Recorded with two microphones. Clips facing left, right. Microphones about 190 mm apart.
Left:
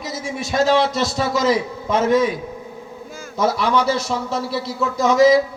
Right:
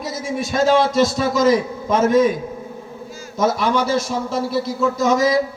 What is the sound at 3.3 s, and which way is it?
A man's voice, 50° right (ahead or behind).